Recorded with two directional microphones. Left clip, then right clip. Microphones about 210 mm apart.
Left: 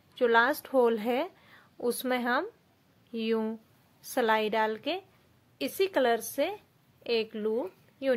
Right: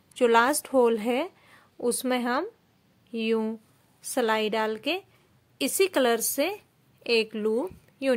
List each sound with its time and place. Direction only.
0.1 s a woman's voice: 25° right (ahead or behind)